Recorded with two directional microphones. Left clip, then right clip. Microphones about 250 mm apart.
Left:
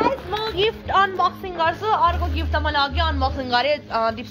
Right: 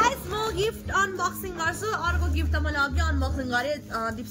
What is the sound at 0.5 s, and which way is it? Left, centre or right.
Speech, right.